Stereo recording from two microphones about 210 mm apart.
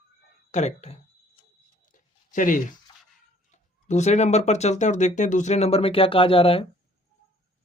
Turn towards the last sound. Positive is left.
turn(degrees=25)  # may be behind; listen again after turning